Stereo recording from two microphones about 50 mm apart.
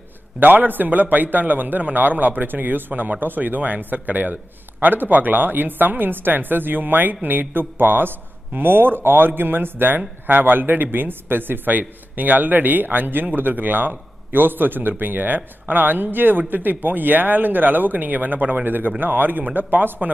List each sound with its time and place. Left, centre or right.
0.4 s speech: right